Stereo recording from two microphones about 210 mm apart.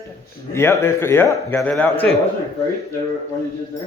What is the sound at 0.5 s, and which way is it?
A man's voice, 10° left (ahead or behind).